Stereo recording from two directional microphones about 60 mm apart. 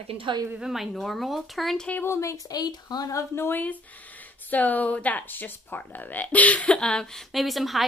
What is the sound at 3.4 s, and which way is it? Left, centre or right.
Speech, left.